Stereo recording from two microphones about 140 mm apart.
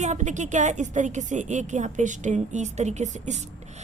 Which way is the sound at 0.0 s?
55° right (ahead or behind).